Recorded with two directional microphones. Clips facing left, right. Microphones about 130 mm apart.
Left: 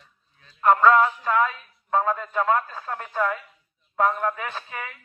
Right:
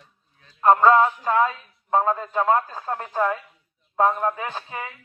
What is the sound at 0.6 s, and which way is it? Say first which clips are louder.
A man's voice: right 2 dB; 30° right (ahead or behind).